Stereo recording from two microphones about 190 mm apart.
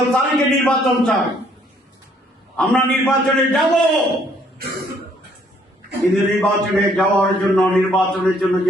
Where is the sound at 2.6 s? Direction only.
5° left (ahead or behind).